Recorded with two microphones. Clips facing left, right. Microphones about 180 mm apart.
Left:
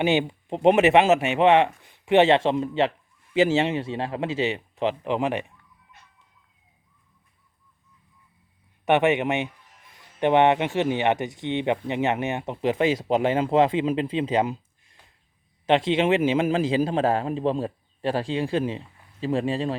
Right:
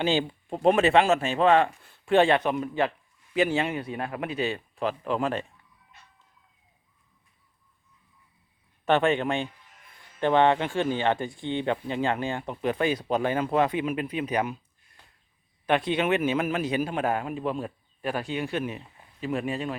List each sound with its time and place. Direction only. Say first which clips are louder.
0.0 s a man's voice: left 3 dB; 20° left (ahead or behind)
8.9 s a man's voice: left 3 dB; 20° left (ahead or behind)